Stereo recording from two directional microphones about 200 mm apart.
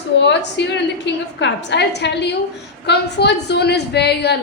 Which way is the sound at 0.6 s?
60° left (ahead or behind).